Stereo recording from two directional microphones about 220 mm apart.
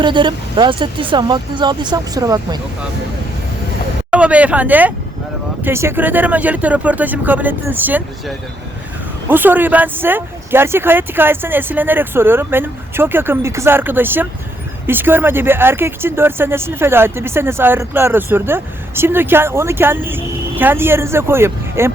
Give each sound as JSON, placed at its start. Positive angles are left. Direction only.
{"t": 0.0, "sound": "speech", "side_deg": -20}
{"t": 4.1, "sound": "speech", "side_deg": -5}
{"t": 9.3, "sound": "speech", "side_deg": -10}